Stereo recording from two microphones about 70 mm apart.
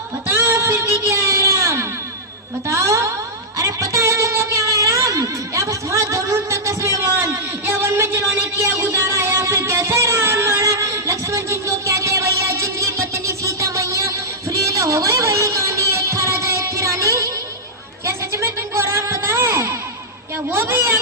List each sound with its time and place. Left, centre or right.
0.3 s music: right
2.6 s speech: right
3.6 s music: right
18.0 s a sound: right
20.5 s a woman's voice: right